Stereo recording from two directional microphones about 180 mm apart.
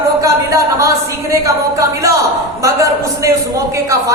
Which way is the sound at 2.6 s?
15° right (ahead or behind).